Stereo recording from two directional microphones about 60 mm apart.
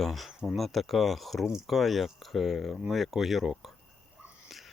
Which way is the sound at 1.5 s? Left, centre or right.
Centre.